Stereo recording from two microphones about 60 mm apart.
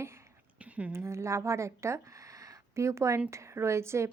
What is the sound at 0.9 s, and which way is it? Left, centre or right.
A woman's voice, right.